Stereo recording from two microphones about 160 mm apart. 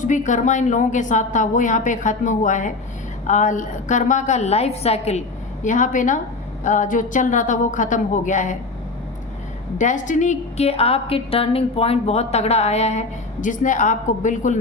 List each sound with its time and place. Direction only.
0.0 s a woman's voice: 50° left (ahead or behind)
5.6 s a woman's voice: 55° left (ahead or behind)
9.7 s a woman's voice: 50° left (ahead or behind)